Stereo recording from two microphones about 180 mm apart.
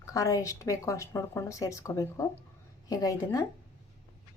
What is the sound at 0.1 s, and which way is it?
A woman's voice, 20° left (ahead or behind).